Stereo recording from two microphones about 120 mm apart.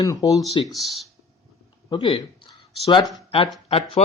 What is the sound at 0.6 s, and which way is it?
Speech, centre (ahead or behind).